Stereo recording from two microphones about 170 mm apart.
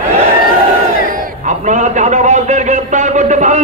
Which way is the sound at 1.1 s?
50° right (ahead or behind).